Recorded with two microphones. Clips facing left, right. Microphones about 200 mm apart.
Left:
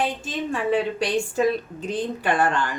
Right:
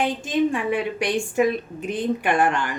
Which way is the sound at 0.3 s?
15° right (ahead or behind).